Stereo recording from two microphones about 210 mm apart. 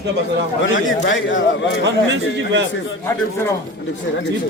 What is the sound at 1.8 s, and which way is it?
Speech, 60° right (ahead or behind).